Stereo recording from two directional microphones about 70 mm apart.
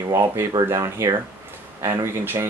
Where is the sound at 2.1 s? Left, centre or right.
Right.